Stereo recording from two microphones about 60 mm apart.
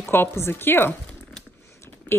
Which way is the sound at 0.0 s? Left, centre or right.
Left.